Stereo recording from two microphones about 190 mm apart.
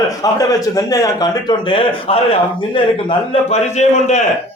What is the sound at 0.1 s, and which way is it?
A man's voice, 20° left (ahead or behind).